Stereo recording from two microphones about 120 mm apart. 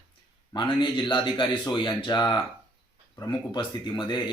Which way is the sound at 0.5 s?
40° left (ahead or behind).